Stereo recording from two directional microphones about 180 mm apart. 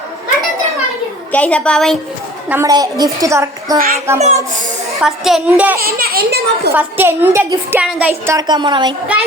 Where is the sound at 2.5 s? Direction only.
15° right (ahead or behind).